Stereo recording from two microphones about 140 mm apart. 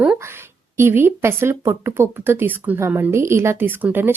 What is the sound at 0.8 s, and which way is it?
Speech, 15° right (ahead or behind).